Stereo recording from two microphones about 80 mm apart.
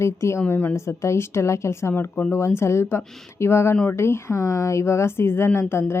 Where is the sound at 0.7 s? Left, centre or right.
Left.